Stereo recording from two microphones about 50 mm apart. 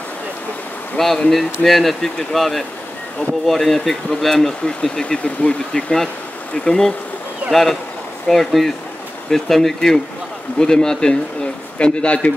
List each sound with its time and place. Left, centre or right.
0.9 s a man's voice: centre
8.3 s a man's voice: centre; by 12.3 s left